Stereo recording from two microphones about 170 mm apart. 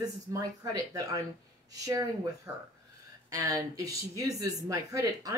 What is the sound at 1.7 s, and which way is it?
Speech, 20° right (ahead or behind).